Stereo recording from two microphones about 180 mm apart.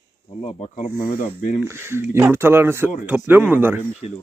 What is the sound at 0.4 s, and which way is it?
Speech, 35° left (ahead or behind).